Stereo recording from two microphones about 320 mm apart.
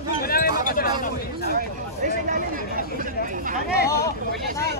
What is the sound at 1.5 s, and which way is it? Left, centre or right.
Speech, right.